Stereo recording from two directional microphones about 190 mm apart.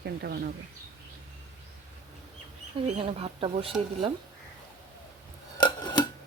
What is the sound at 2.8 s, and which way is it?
Speech, 30° right (ahead or behind).